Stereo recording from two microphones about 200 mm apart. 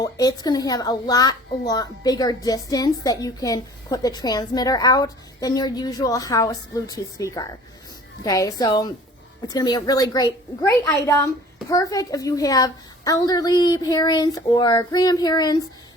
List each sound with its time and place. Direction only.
0.0 s a woman's voice: 20° left (ahead or behind)